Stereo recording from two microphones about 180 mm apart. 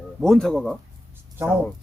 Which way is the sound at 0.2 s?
5° left (ahead or behind).